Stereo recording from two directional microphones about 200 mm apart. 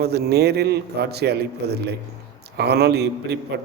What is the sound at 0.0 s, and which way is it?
A man's voice, 55° right (ahead or behind).